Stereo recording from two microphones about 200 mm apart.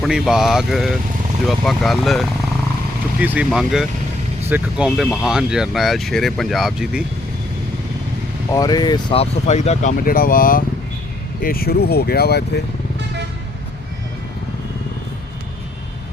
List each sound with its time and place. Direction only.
0.0 s speech: 5° right (ahead or behind)
8.5 s speech: 20° left (ahead or behind)
9.5 s speech: 35° left (ahead or behind); by 12.6 s 55° left (ahead or behind)